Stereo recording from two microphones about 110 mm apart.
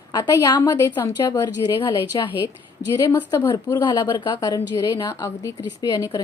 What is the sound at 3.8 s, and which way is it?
A woman's voice, 45° left (ahead or behind).